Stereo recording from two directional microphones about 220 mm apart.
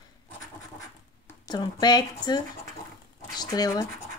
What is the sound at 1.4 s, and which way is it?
Speech, 20° left (ahead or behind).